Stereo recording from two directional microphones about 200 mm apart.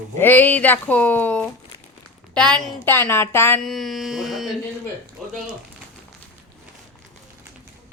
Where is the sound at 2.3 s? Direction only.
5° left (ahead or behind).